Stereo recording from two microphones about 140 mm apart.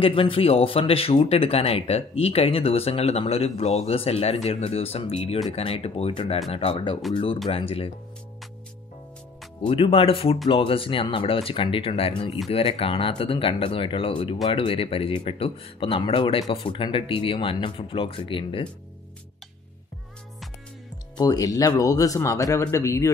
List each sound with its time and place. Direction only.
0.0 s speech: 40° left (ahead or behind)
9.6 s speech: 40° left (ahead or behind)
21.2 s a man's voice: 25° left (ahead or behind)